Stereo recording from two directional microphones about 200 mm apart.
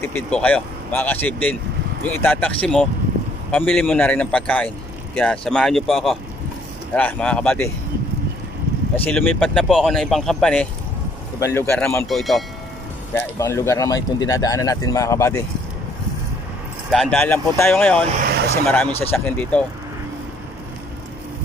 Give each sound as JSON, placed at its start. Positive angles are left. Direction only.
{"t": 0.0, "sound": "speech", "side_deg": 10}
{"t": 8.9, "sound": "speech", "side_deg": 5}
{"t": 13.1, "sound": "speech", "side_deg": 10}
{"t": 16.9, "sound": "speech", "side_deg": 5}
{"t": 18.2, "sound": "speech", "side_deg": -50}
{"t": 18.9, "sound": "speech", "side_deg": 30}
{"t": 19.1, "sound": "speech", "side_deg": 5}